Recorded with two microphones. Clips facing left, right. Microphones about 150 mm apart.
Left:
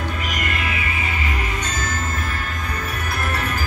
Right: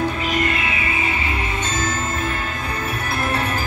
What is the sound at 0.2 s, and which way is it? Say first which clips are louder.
Music: right 4 dB; 30° right (ahead or behind).